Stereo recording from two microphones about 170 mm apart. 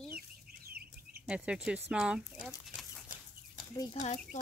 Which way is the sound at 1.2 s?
5° right (ahead or behind).